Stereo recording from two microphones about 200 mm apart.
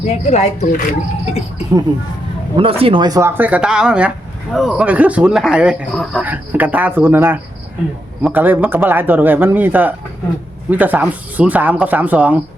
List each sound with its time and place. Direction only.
0.1 s speech: 35° left (ahead or behind)
2.6 s speech: 30° right (ahead or behind); by 12.4 s 5° right (ahead or behind)